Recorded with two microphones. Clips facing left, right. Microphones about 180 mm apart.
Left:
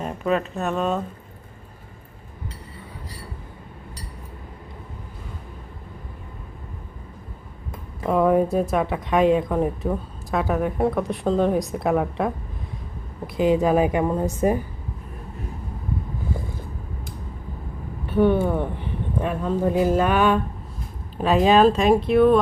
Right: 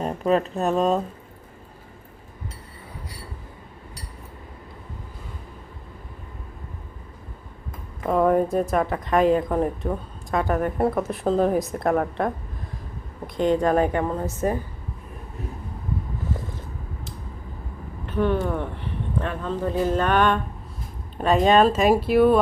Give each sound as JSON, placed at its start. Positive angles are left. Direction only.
{"t": 0.0, "sound": "speech", "side_deg": -35}
{"t": 8.0, "sound": "a woman's voice", "side_deg": 0}
{"t": 18.0, "sound": "a woman's voice", "side_deg": 10}